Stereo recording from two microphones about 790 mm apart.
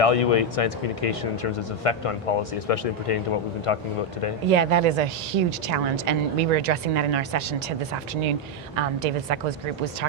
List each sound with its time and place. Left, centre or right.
0.0 s speech: left
4.4 s a woman's voice: right